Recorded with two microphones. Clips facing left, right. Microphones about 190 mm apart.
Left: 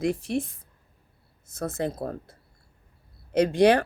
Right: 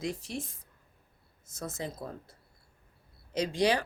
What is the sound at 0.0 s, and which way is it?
Speech, 60° left (ahead or behind).